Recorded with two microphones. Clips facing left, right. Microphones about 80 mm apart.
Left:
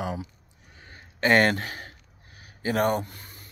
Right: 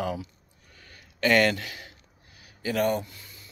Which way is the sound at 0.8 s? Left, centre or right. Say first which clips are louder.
Left 1 dB; left.